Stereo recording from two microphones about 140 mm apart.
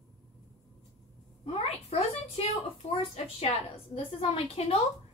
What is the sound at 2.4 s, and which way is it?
A woman's voice, 45° left (ahead or behind).